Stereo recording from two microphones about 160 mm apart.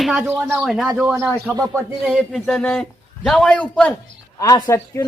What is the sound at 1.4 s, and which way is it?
Speech, 15° right (ahead or behind).